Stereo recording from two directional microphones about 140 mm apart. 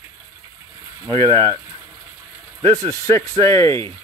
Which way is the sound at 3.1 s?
20° left (ahead or behind).